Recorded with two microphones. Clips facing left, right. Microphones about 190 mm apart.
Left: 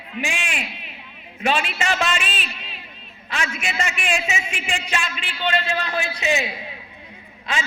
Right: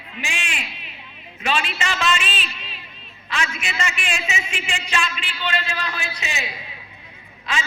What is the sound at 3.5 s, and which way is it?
Speech, 50° left (ahead or behind).